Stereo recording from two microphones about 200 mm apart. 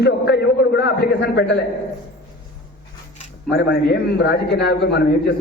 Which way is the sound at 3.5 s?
55° left (ahead or behind).